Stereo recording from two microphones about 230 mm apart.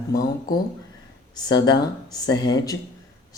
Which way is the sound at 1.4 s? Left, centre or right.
Centre.